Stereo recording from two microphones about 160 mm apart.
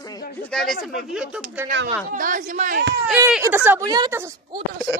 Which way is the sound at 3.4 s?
15° right (ahead or behind).